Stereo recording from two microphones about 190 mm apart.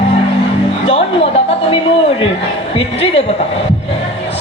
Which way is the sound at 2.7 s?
30° left (ahead or behind).